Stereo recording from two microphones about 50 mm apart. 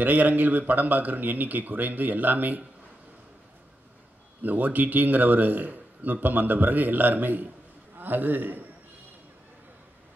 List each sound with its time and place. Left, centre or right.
0.0 s speech: right
4.4 s speech: right